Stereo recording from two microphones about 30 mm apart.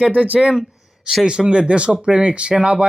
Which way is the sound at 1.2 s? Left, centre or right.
Right.